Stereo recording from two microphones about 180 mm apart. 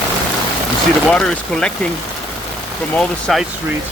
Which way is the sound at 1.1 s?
5° left (ahead or behind).